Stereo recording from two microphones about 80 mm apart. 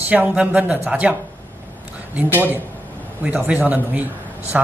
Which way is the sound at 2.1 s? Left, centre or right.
Right.